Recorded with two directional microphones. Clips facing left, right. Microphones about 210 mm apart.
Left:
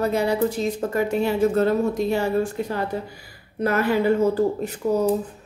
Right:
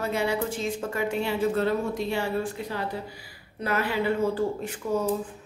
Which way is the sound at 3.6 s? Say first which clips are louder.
Left 6 dB; 45° left (ahead or behind).